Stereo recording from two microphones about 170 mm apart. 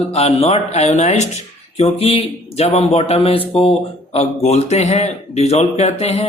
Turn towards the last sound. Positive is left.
turn(degrees=40)  # may be behind; listen again after turning